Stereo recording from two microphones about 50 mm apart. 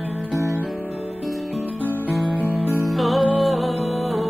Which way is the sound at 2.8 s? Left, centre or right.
Centre.